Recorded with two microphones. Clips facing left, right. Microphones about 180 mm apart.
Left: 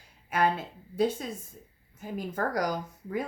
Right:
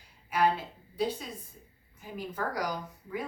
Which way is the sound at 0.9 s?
50° left (ahead or behind).